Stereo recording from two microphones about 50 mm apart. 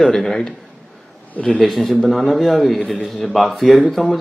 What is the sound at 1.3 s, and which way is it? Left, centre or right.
Speech, left.